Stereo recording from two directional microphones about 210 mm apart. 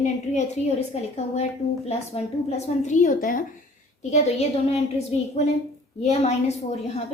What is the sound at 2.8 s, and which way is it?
A woman's voice, 40° left (ahead or behind).